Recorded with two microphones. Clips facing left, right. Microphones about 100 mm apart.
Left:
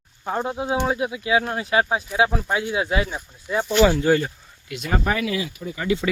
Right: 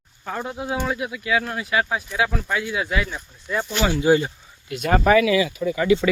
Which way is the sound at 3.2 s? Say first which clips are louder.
Left 1 dB; 15° left (ahead or behind).